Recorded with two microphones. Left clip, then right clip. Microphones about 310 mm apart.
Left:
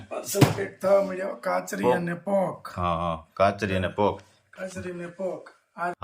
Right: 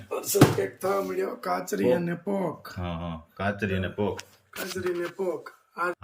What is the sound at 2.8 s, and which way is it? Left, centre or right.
Speech, centre.